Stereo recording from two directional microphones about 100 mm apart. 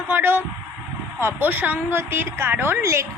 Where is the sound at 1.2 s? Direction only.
20° right (ahead or behind).